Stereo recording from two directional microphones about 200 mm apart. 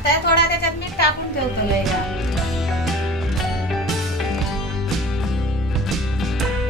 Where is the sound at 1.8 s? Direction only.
Centre (ahead or behind).